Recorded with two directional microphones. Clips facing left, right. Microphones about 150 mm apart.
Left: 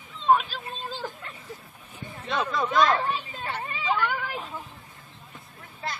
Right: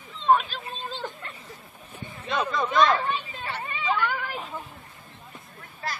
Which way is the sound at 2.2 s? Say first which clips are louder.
Even; centre (ahead or behind).